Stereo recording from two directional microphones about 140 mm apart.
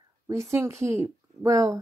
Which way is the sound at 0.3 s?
20° right (ahead or behind).